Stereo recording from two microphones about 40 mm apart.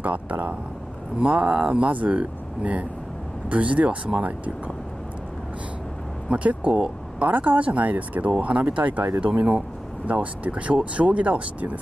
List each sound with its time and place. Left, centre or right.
0.0 s speech: right
1.9 s speech: right
6.3 s speech: right